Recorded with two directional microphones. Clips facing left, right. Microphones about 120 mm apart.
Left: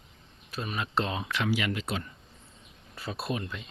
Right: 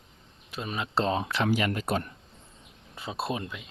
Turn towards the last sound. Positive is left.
turn(degrees=-25)  # may be behind; listen again after turning